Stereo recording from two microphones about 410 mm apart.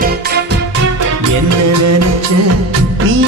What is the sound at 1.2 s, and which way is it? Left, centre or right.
Music, right.